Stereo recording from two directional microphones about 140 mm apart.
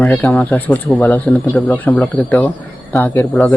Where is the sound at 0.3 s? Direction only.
10° left (ahead or behind).